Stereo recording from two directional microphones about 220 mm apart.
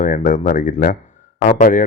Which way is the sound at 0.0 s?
35° left (ahead or behind).